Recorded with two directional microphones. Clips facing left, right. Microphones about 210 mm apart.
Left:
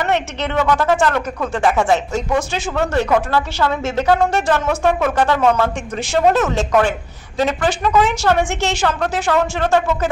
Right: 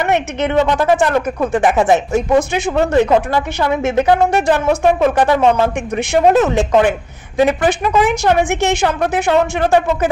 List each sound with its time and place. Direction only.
0.0 s speech: 15° right (ahead or behind)